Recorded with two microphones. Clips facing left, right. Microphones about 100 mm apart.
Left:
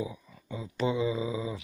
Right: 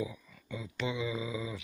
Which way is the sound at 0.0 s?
30° left (ahead or behind).